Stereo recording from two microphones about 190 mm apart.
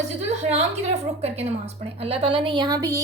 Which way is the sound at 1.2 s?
35° right (ahead or behind).